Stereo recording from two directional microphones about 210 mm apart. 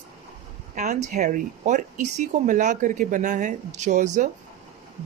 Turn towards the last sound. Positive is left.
turn(degrees=-35)  # may be behind; listen again after turning